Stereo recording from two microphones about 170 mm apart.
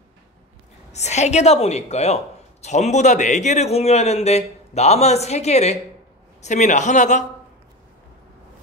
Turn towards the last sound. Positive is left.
turn(degrees=45)  # may be behind; listen again after turning